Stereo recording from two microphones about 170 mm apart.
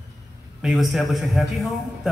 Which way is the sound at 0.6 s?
5° right (ahead or behind).